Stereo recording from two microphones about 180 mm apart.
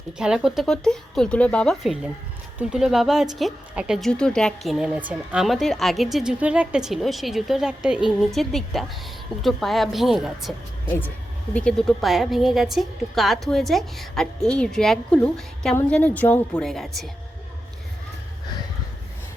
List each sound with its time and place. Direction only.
0.2 s speech: 5° right (ahead or behind)
11.5 s speech: 5° left (ahead or behind)